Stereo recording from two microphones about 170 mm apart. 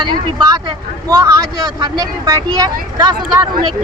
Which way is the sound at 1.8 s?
25° right (ahead or behind).